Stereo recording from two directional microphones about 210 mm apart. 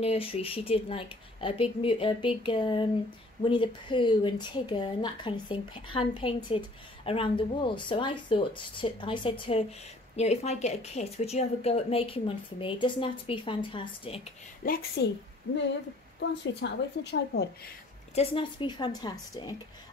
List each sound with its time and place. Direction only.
0.0 s speech: 30° left (ahead or behind)
14.6 s a woman's voice: 45° left (ahead or behind)
16.2 s a woman's voice: 55° left (ahead or behind)
18.1 s speech: 25° left (ahead or behind)